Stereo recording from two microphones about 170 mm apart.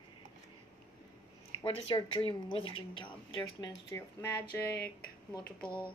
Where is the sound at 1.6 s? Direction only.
35° left (ahead or behind).